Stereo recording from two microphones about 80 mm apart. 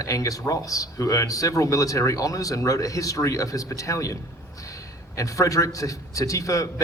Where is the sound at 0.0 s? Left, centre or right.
Left.